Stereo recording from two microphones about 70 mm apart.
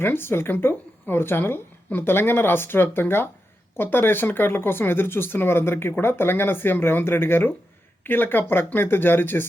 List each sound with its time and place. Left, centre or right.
0.0 s speech: left